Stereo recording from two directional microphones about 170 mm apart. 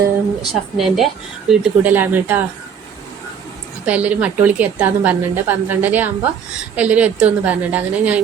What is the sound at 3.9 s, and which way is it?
A woman's voice, 10° right (ahead or behind).